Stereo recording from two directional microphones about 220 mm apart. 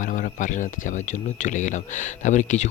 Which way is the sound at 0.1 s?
35° left (ahead or behind).